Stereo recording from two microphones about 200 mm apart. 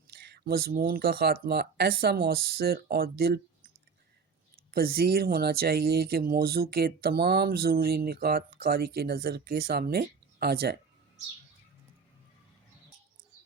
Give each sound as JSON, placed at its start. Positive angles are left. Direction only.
{"t": 0.1, "sound": "speech", "side_deg": -50}
{"t": 4.7, "sound": "speech", "side_deg": -50}